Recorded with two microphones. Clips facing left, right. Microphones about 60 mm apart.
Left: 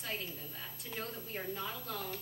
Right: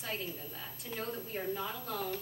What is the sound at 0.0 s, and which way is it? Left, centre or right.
A woman's voice, centre.